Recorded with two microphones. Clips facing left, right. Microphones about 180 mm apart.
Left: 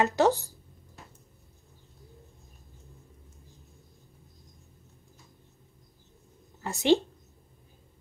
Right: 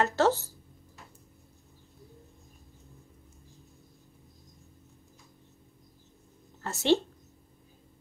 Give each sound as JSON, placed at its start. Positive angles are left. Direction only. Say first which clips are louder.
{"t": 0.0, "sound": "speech", "louder": "left 2 dB", "side_deg": 15}
{"t": 6.6, "sound": "a woman's voice", "louder": "left 2 dB", "side_deg": 15}